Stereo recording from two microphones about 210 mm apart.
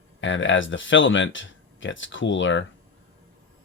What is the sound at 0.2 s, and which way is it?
Speech, 60° left (ahead or behind).